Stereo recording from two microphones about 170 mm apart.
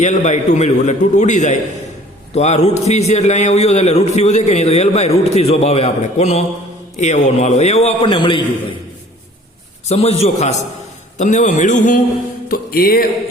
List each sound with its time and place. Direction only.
0.0 s a man's voice: 45° left (ahead or behind)
9.9 s a man's voice: 35° left (ahead or behind)
12.5 s music: 60° left (ahead or behind)